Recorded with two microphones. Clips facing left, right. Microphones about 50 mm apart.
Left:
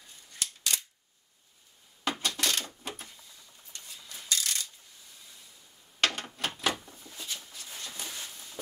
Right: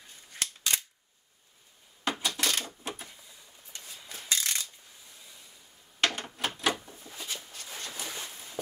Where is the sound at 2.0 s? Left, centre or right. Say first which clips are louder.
Even; centre.